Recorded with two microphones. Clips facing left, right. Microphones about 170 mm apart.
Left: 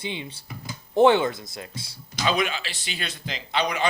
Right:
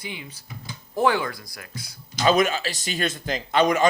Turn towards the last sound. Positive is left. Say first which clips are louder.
# right 6 dB
turn(degrees=-45)  # may be behind; listen again after turning